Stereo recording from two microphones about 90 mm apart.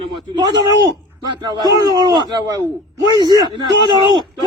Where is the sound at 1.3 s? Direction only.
50° right (ahead or behind).